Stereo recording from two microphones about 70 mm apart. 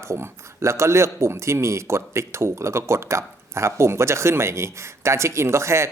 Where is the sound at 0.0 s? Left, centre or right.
Right.